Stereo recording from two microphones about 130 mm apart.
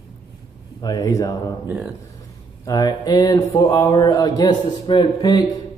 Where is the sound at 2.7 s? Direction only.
30° left (ahead or behind).